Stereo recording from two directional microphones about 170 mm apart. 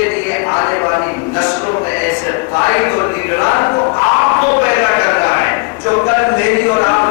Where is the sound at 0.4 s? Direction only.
20° left (ahead or behind).